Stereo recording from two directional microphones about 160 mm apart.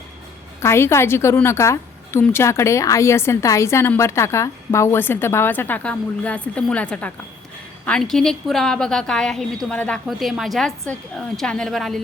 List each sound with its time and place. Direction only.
0.6 s a woman's voice: 15° left (ahead or behind)